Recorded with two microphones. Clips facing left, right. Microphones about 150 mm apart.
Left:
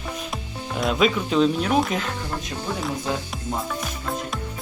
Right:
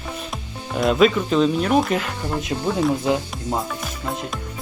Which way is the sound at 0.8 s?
Centre (ahead or behind).